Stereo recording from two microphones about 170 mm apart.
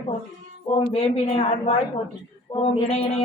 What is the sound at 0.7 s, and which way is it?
A man's voice, 35° left (ahead or behind).